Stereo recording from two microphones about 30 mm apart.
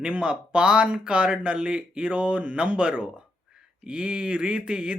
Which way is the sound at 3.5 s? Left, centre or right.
Right.